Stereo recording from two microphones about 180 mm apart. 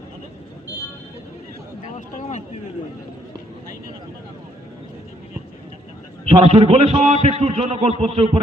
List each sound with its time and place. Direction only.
6.2 s a man's voice: 35° right (ahead or behind)